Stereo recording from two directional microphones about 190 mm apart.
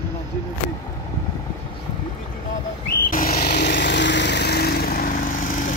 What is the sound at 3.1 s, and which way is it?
Vehicle, 50° left (ahead or behind).